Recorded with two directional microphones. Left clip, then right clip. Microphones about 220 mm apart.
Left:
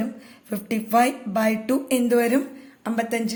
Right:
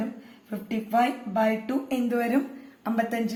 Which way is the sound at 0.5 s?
50° left (ahead or behind).